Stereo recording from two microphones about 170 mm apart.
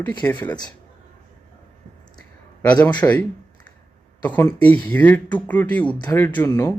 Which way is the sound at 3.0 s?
15° left (ahead or behind).